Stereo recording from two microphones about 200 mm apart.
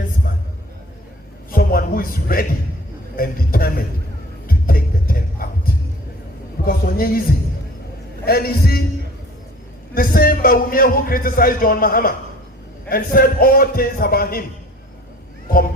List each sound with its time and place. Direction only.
1.5 s a sound: 45° left (ahead or behind)
3.2 s a man's voice: 45° left (ahead or behind)
4.4 s music: 45° left (ahead or behind)
6.7 s a man's voice: 45° left (ahead or behind)
8.2 s a man's voice: 50° left (ahead or behind)
9.9 s a man's voice: 45° left (ahead or behind)